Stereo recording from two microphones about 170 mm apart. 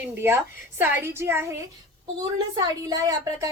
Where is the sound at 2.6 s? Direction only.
20° right (ahead or behind).